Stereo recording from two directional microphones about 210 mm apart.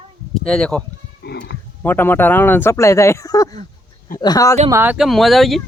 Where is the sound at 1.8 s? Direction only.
10° left (ahead or behind).